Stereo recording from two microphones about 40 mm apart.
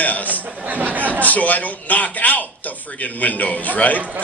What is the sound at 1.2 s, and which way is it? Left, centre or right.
A man's voice, left.